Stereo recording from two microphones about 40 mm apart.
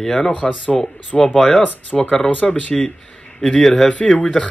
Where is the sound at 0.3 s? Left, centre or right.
Left.